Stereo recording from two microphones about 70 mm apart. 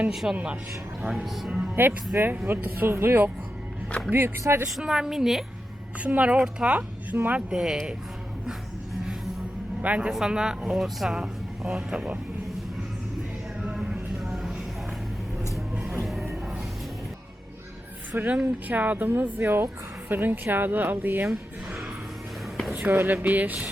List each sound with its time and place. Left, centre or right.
0.1 s speech: centre
1.5 s speech: centre
1.7 s speech: right
4.8 s speech: centre
6.0 s speech: right
7.5 s speech: centre
9.8 s speech: right
10.1 s speech: centre
13.6 s a sound: centre
15.9 s music: centre
18.3 s speech: right
22.7 s speech: right